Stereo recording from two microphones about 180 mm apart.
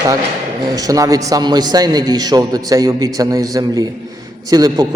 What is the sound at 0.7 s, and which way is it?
A man's voice, 20° right (ahead or behind).